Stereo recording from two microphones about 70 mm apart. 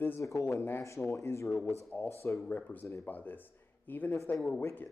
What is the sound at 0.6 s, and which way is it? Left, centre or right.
Speech, left.